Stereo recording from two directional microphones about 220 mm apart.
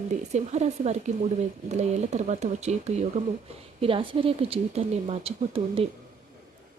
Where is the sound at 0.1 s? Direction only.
30° right (ahead or behind).